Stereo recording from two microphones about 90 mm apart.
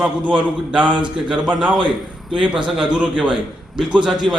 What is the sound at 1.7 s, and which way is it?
Speech, 60° right (ahead or behind).